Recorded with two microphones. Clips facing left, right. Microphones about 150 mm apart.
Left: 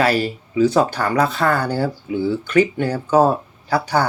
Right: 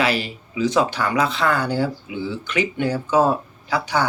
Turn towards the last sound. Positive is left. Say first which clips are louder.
# left 3 dB
turn(degrees=40)  # may be behind; listen again after turning